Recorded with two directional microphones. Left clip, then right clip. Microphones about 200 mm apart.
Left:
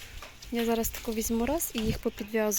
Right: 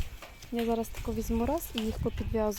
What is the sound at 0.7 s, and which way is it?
A woman's voice, 5° left (ahead or behind).